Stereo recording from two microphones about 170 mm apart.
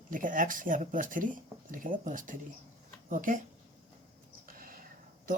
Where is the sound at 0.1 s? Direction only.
50° right (ahead or behind).